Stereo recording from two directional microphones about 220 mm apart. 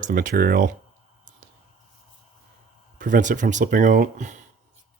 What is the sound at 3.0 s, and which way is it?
Speech, 35° right (ahead or behind).